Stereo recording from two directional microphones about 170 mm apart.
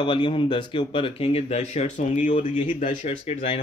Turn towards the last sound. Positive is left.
turn(degrees=40)  # may be behind; listen again after turning